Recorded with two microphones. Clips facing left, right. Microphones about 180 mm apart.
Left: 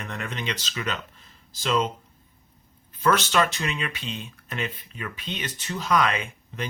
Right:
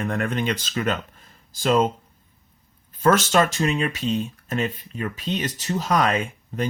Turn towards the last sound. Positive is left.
turn(degrees=-45)  # may be behind; listen again after turning